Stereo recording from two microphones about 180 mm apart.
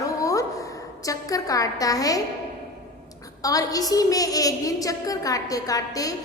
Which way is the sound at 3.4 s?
20° left (ahead or behind).